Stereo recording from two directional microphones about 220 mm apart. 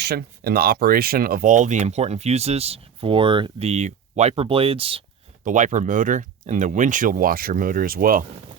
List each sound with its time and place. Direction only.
0.0 s speech: 45° right (ahead or behind)